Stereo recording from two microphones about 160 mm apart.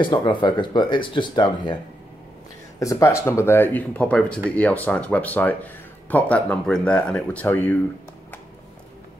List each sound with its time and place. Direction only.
0.0 s speech: 30° left (ahead or behind)
2.8 s speech: 20° left (ahead or behind)